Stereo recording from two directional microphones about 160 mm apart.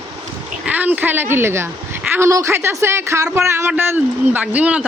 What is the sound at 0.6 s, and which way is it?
A woman's voice, 10° right (ahead or behind).